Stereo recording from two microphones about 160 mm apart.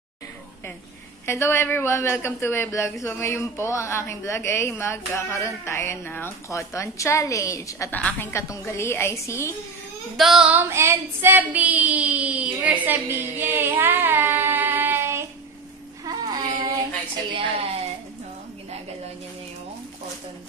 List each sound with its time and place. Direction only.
1.2 s a man's voice: 15° left (ahead or behind)
10.1 s child singing: centre (ahead or behind)
10.7 s a sound: 15° right (ahead or behind)
17.3 s a woman's voice: 35° right (ahead or behind)